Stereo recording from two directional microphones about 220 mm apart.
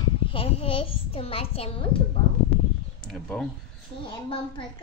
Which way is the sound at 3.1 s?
5° left (ahead or behind).